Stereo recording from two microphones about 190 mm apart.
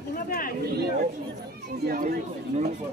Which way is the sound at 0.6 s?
55° right (ahead or behind).